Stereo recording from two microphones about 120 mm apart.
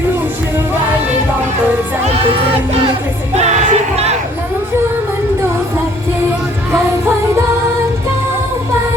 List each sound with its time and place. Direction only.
3.3 s music: 70° right (ahead or behind)